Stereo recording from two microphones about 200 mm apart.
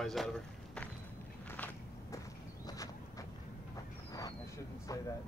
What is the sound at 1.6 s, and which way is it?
Walk, 15° left (ahead or behind).